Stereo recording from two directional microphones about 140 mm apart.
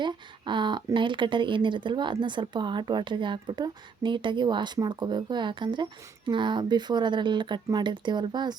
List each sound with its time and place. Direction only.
0.0 s speech: 35° right (ahead or behind)